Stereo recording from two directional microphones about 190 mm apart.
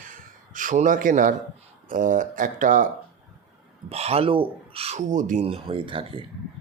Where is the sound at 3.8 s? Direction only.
35° right (ahead or behind).